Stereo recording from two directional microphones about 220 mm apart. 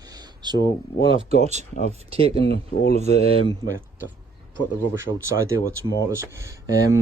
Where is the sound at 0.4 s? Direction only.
20° right (ahead or behind).